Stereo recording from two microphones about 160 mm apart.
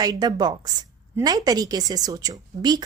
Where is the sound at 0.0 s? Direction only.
25° right (ahead or behind).